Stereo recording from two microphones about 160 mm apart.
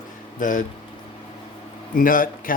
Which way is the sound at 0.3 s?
55° left (ahead or behind).